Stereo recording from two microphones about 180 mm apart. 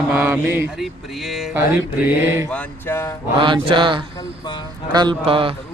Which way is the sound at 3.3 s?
25° right (ahead or behind).